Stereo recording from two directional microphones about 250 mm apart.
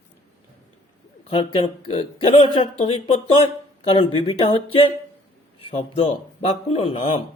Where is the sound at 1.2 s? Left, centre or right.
Left.